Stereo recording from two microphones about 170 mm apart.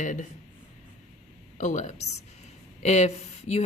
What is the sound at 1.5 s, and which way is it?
Speech, 45° left (ahead or behind).